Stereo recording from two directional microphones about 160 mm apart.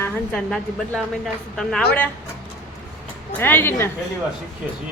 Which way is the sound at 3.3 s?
10° left (ahead or behind).